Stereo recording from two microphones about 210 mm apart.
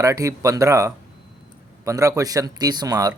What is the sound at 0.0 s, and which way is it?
Speech, 15° right (ahead or behind).